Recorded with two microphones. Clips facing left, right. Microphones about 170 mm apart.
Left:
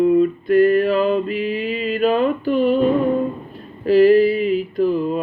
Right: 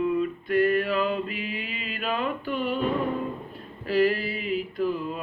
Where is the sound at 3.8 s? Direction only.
40° left (ahead or behind).